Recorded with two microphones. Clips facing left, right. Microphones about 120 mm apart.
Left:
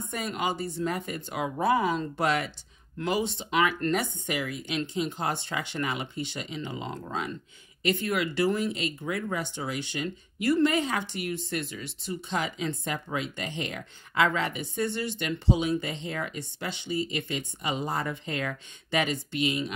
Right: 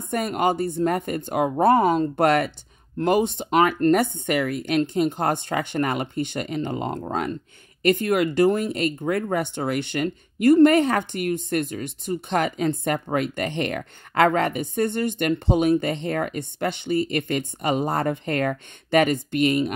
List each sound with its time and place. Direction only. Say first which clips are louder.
0.1 s speech: right 9 dB; 55° right (ahead or behind)